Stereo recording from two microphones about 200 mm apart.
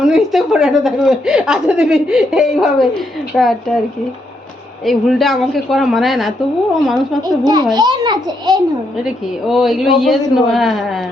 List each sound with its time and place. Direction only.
0.0 s a woman's voice: centre (ahead or behind)
4.9 s a woman's voice: centre (ahead or behind)
7.2 s a child's voice: 20° right (ahead or behind)
9.0 s a woman's voice: centre (ahead or behind)